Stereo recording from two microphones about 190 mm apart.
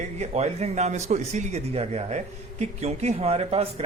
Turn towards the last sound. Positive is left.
turn(degrees=-35)  # may be behind; listen again after turning